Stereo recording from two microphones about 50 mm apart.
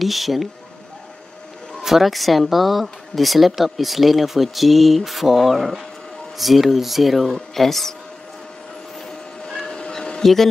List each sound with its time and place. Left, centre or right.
0.0 s speech: centre
1.8 s speech: centre
9.5 s printer: centre
9.8 s cat: centre
10.2 s speech: centre